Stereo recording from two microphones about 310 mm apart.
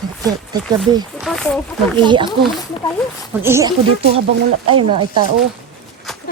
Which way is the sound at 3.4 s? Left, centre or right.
Centre.